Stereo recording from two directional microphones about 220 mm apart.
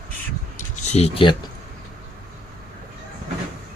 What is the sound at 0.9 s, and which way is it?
Speech, 30° left (ahead or behind).